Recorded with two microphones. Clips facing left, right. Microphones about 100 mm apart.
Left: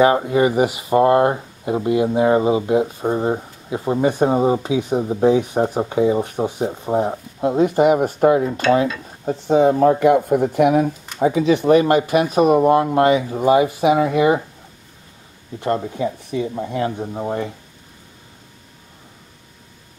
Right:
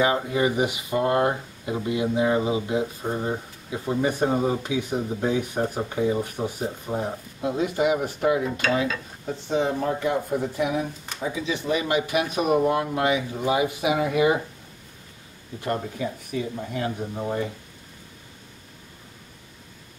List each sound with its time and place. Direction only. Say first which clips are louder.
0.0 s speech: left 7 dB; 35° left (ahead or behind)
15.6 s speech: left 7 dB; 30° left (ahead or behind)